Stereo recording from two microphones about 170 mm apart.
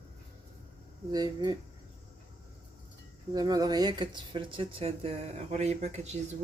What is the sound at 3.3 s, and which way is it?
Speech, 20° right (ahead or behind).